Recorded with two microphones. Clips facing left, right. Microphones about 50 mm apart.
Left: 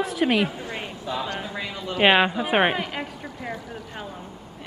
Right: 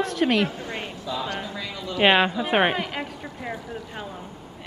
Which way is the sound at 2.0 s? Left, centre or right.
Centre.